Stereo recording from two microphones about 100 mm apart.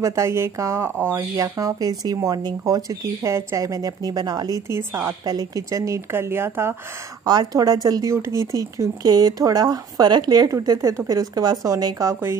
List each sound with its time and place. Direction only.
0.0 s speech: 30° right (ahead or behind)
1.3 s a woman's voice: 35° right (ahead or behind)
5.2 s speech: 40° right (ahead or behind); by 6.8 s 25° right (ahead or behind)
7.2 s a woman's voice: 40° right (ahead or behind)